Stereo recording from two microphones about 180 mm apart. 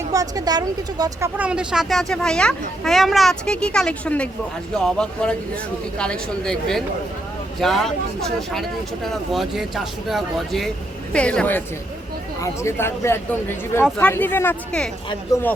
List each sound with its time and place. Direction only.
0.1 s speech: 20° right (ahead or behind)
1.4 s speech: 5° right (ahead or behind)
9.0 s speech: centre (ahead or behind); by 15.5 s 20° left (ahead or behind)